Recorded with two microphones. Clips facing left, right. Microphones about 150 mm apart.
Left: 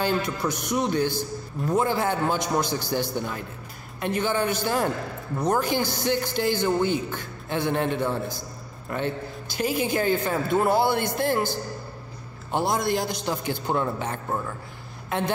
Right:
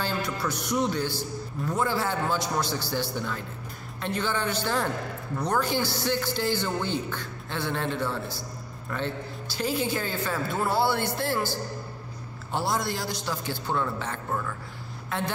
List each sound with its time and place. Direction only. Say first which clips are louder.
0.0 s a man's voice: left 4 dB; 15° left (ahead or behind)